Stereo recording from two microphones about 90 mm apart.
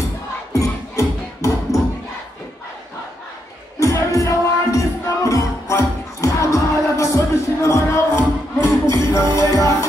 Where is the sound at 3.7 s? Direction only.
35° left (ahead or behind).